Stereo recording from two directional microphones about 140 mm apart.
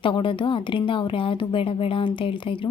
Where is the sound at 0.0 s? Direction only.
35° left (ahead or behind).